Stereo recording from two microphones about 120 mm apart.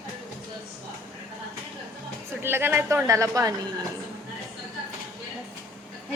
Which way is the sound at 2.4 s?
20° right (ahead or behind).